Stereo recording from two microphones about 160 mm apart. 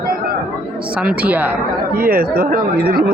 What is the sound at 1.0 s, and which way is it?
Speech, 10° right (ahead or behind).